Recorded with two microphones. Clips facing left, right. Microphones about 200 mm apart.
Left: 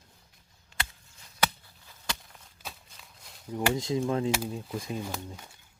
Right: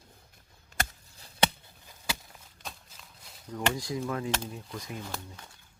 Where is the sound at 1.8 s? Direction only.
5° right (ahead or behind).